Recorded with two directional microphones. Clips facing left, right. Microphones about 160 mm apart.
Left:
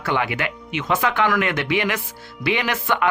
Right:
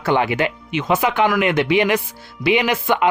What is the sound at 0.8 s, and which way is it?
Speech, 15° right (ahead or behind).